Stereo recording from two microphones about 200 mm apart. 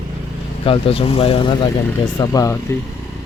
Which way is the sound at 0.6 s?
30° left (ahead or behind).